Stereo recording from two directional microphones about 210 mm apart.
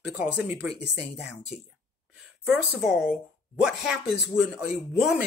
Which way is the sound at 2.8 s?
Centre (ahead or behind).